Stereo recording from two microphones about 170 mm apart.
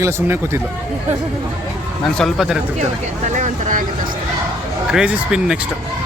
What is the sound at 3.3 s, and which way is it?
Speech, 50° right (ahead or behind).